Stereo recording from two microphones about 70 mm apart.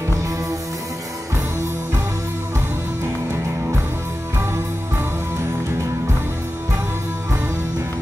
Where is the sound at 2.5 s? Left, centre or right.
Right.